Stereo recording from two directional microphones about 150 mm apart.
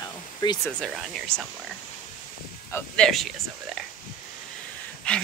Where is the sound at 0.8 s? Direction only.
Centre (ahead or behind).